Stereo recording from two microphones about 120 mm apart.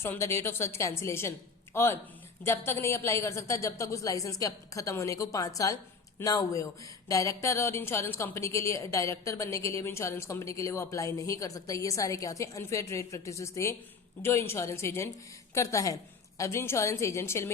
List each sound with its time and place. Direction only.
0.0 s a woman's voice: 20° left (ahead or behind)